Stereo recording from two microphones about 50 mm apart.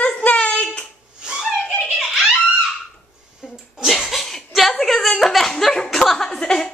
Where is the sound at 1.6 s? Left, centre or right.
Centre.